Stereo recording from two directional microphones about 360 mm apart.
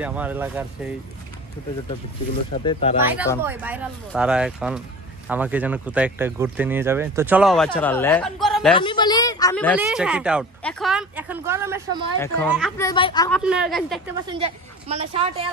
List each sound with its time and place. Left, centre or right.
0.0 s speech: centre
2.5 s speech: centre
3.4 s speech: centre
8.7 s speech: centre
12.2 s speech: centre
13.4 s speech: centre
14.2 s a woman's voice: centre